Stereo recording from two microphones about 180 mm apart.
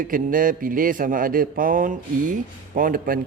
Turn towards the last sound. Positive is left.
turn(degrees=-50)  # may be behind; listen again after turning